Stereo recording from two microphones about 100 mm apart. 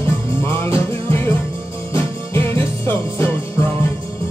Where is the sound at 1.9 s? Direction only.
25° left (ahead or behind).